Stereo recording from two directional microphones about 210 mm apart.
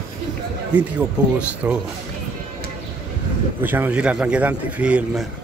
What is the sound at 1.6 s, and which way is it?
Speech, 10° right (ahead or behind).